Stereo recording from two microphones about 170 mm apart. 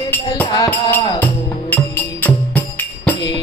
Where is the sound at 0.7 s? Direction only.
10° left (ahead or behind).